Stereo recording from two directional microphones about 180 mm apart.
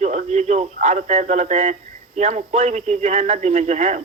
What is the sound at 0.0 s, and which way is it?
Speech, 40° right (ahead or behind).